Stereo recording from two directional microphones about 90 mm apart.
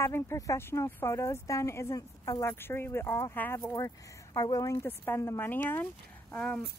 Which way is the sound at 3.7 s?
40° left (ahead or behind).